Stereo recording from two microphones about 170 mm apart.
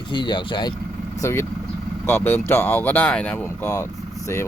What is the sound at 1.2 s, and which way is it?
Speech, 15° left (ahead or behind).